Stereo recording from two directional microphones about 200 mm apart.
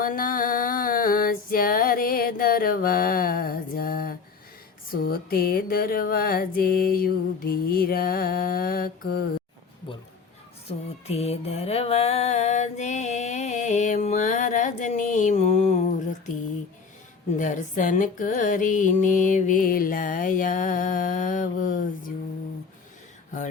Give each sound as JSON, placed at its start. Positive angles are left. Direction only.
{"t": 0.0, "sound": "a sound", "side_deg": 45}
{"t": 4.9, "sound": "mantra", "side_deg": 50}
{"t": 10.7, "sound": "music", "side_deg": 30}
{"t": 17.3, "sound": "music", "side_deg": 40}